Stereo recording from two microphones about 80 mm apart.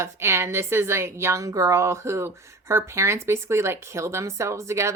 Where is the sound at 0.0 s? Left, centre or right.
Right.